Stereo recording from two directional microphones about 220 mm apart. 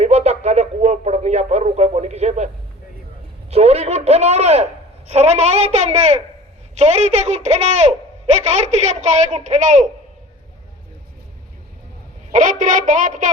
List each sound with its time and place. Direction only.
0.0 s radio: 30° right (ahead or behind)
3.5 s a man's voice: 30° right (ahead or behind)
12.3 s a man's voice: 35° right (ahead or behind)